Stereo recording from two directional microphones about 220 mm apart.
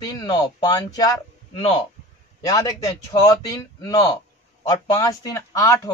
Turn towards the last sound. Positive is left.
turn(degrees=15)  # may be behind; listen again after turning